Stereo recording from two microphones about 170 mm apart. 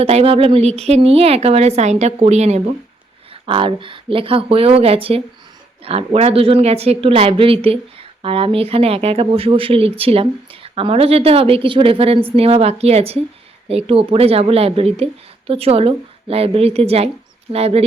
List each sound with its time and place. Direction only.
0.0 s a woman's voice: 35° right (ahead or behind)